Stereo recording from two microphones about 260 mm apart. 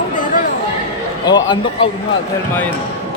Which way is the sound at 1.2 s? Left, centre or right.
Centre.